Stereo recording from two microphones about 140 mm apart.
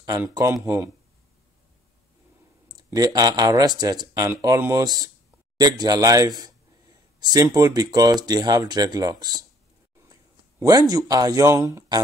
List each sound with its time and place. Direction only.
0.3 s speech: 20° right (ahead or behind)
2.7 s speech: 25° right (ahead or behind)
10.6 s speech: 30° right (ahead or behind)